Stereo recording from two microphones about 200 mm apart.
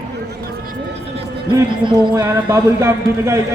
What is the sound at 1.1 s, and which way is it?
Music, 25° right (ahead or behind).